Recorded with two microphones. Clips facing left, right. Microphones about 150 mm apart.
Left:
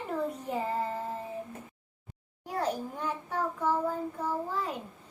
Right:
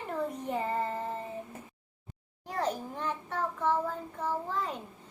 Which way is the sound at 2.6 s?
10° left (ahead or behind).